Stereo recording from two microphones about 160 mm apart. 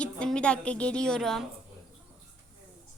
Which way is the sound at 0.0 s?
5° left (ahead or behind).